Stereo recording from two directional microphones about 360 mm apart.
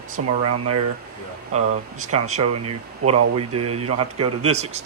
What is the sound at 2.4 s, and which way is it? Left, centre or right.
Speech, right.